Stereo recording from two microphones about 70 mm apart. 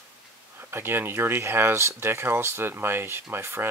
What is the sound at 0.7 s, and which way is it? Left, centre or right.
Speech, right.